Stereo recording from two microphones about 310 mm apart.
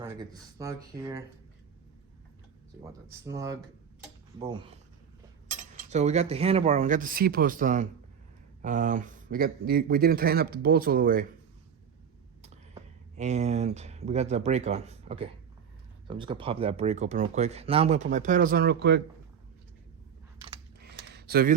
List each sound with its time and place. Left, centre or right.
0.0 s speech: centre
3.1 s speech: centre
5.5 s speech: right
12.4 s speech: right
20.7 s a sound: right